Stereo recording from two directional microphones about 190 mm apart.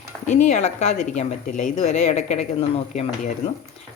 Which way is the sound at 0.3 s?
40° left (ahead or behind).